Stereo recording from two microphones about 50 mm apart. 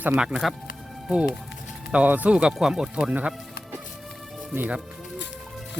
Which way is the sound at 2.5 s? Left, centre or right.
Centre.